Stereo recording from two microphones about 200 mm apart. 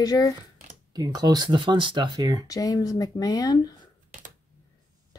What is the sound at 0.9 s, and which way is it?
Speech, 20° right (ahead or behind).